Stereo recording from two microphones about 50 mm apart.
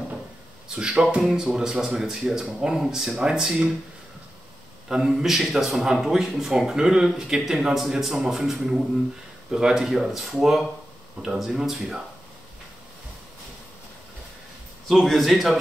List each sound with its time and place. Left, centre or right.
0.7 s a man's voice: centre
4.8 s a man's voice: centre
14.9 s a man's voice: centre